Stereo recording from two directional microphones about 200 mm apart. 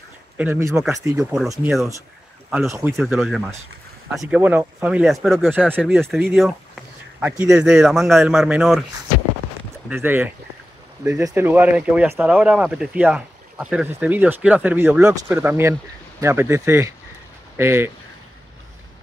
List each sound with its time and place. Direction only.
0.4 s speech: 10° right (ahead or behind)
1.1 s speech: 5° right (ahead or behind)
3.0 s speech: centre (ahead or behind)
5.7 s speech: 10° right (ahead or behind)
5.9 s speech: centre (ahead or behind)
9.8 s speech: 10° right (ahead or behind)